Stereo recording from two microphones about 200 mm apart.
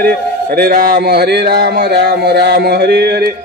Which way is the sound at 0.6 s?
50° right (ahead or behind).